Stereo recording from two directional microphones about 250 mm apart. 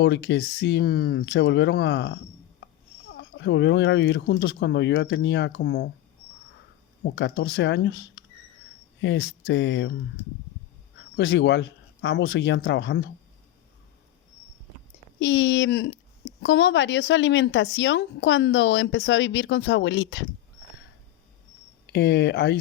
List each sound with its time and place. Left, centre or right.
0.0 s speech: left
3.2 s speech: left
7.0 s speech: left
11.2 s speech: left
15.2 s speech: left
21.9 s speech: left